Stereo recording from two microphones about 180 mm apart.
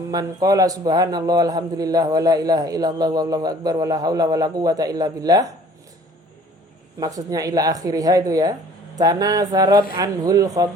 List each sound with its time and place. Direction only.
0.1 s a man's voice: 20° right (ahead or behind)
7.0 s a man's voice: 20° right (ahead or behind)